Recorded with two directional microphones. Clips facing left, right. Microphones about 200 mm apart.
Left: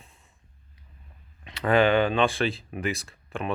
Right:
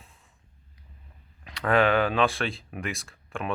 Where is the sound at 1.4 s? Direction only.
Centre (ahead or behind).